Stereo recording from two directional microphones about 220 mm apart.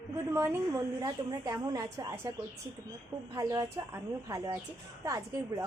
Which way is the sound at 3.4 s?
15° right (ahead or behind).